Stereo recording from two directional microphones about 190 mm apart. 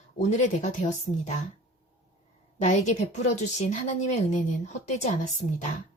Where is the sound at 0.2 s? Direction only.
40° left (ahead or behind).